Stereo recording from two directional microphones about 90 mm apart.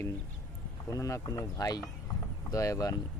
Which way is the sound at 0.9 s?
35° left (ahead or behind).